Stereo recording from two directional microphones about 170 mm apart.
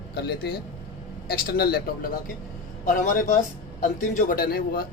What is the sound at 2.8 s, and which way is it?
A man's voice, 50° left (ahead or behind).